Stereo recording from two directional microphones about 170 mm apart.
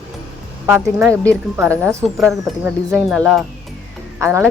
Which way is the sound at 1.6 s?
15° right (ahead or behind).